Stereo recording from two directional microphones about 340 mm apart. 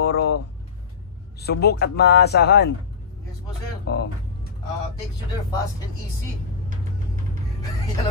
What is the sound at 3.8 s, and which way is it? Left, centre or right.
Speech, left.